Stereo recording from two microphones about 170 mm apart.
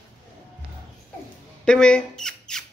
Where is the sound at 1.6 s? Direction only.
5° left (ahead or behind).